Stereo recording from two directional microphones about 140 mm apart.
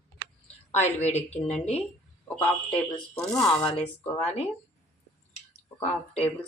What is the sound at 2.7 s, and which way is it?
Speech, 5° left (ahead or behind).